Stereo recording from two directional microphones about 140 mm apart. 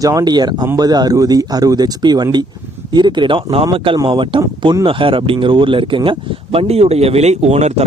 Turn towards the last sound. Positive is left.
turn(degrees=-55)  # may be behind; listen again after turning